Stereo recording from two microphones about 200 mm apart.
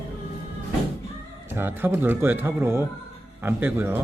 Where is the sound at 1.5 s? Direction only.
10° right (ahead or behind).